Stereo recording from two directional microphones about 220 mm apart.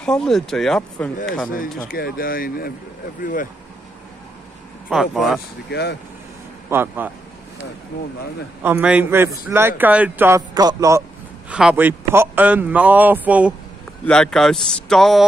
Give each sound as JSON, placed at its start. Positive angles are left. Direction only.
{"t": 0.0, "sound": "speech", "side_deg": 5}
{"t": 1.9, "sound": "speech", "side_deg": 40}
{"t": 4.8, "sound": "speech", "side_deg": 0}
{"t": 5.7, "sound": "speech", "side_deg": 50}
{"t": 6.7, "sound": "speech", "side_deg": -10}
{"t": 8.6, "sound": "speech", "side_deg": -5}